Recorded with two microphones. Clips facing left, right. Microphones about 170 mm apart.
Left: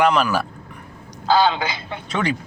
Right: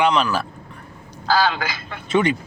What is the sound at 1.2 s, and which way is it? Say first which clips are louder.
Speech: left 2 dB; 20° left (ahead or behind).